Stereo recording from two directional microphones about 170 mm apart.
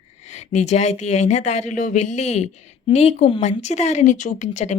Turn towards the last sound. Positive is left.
turn(degrees=45)  # may be behind; listen again after turning